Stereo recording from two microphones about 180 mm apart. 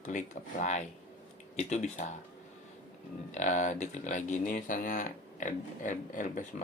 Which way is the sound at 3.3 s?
45° left (ahead or behind).